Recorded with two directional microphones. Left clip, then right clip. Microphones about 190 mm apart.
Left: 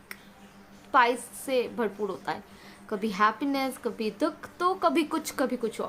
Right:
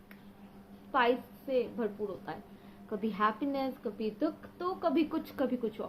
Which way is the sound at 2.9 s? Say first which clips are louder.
Left 6 dB; 35° left (ahead or behind).